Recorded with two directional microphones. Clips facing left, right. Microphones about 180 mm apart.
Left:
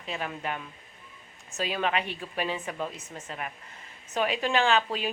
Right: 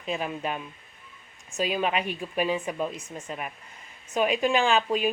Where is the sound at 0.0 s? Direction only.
20° right (ahead or behind).